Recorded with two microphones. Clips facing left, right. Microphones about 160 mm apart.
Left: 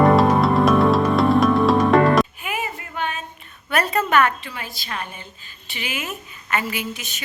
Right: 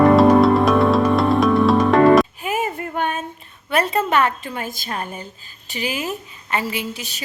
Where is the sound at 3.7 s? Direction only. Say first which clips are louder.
Right 1 dB; 25° right (ahead or behind).